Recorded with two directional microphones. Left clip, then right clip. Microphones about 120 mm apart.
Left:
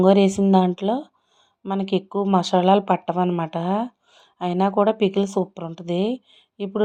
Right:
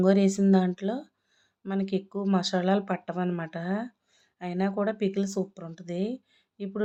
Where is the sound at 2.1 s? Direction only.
35° left (ahead or behind).